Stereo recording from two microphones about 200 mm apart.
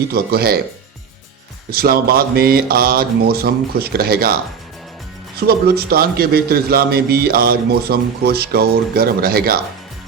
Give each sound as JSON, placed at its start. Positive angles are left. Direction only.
{"t": 0.1, "sound": "a man's voice", "side_deg": -50}
{"t": 1.7, "sound": "a man's voice", "side_deg": -50}
{"t": 5.4, "sound": "a man's voice", "side_deg": -50}